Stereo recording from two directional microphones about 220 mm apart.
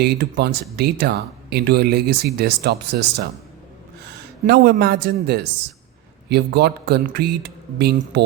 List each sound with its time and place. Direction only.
0.0 s speech: 45° right (ahead or behind)
4.4 s speech: 45° right (ahead or behind)